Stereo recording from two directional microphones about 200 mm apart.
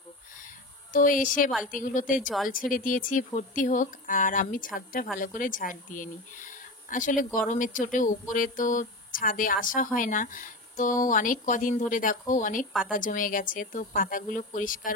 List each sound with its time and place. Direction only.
0.9 s speech: 40° left (ahead or behind)